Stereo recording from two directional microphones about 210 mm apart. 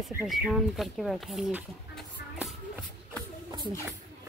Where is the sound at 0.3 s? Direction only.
Centre (ahead or behind).